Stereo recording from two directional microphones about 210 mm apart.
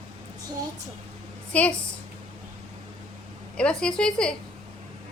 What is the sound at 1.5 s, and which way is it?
Speech, 5° left (ahead or behind).